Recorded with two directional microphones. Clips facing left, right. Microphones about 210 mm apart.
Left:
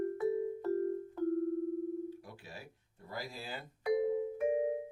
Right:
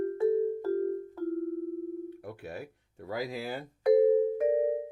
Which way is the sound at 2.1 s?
60° right (ahead or behind).